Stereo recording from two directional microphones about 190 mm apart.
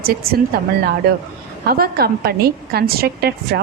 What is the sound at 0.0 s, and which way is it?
Speech, 55° right (ahead or behind).